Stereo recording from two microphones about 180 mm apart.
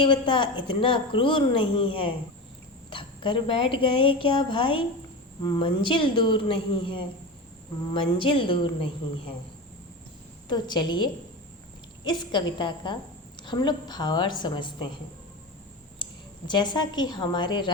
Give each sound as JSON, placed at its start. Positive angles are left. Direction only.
{"t": 0.0, "sound": "speech", "side_deg": 25}
{"t": 10.5, "sound": "speech", "side_deg": 25}
{"t": 16.5, "sound": "speech", "side_deg": 25}